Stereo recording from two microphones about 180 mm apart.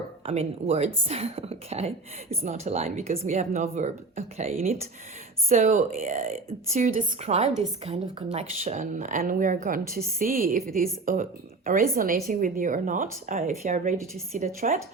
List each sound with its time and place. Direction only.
0.3 s a woman's voice: 35° right (ahead or behind)